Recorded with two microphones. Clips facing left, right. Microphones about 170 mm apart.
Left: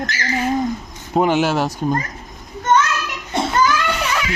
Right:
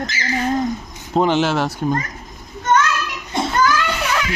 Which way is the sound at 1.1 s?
10° left (ahead or behind).